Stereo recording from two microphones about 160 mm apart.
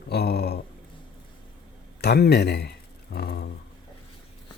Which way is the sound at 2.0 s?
85° left.